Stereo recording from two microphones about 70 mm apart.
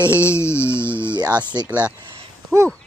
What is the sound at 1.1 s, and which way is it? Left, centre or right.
Speech, right.